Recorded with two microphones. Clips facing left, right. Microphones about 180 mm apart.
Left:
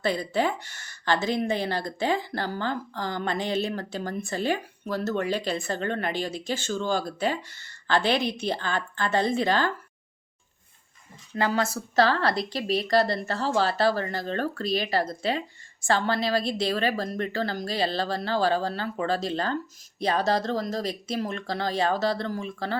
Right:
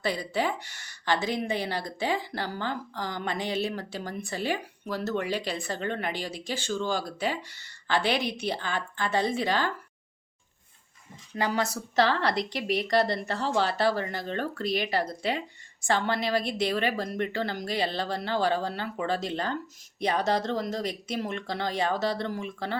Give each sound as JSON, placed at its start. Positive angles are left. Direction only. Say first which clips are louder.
{"t": 0.0, "sound": "speech", "louder": "left 3 dB", "side_deg": -10}
{"t": 11.3, "sound": "speech", "louder": "left 2 dB", "side_deg": -15}